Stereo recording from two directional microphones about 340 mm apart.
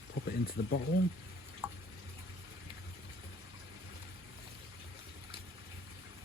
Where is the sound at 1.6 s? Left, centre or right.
Centre.